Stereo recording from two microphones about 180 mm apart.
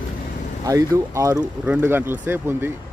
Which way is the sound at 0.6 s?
20° right (ahead or behind).